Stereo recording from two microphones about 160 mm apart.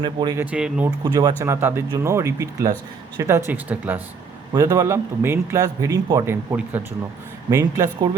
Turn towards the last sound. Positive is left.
turn(degrees=-20)  # may be behind; listen again after turning